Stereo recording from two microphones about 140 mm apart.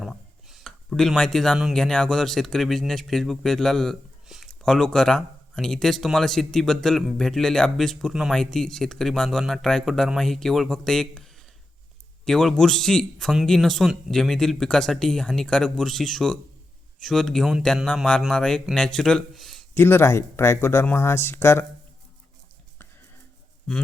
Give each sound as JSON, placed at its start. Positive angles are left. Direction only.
{"t": 0.0, "sound": "speech", "side_deg": 0}
{"t": 19.7, "sound": "speech", "side_deg": 15}